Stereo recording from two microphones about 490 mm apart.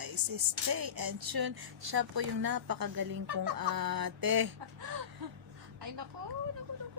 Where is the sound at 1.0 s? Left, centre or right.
Right.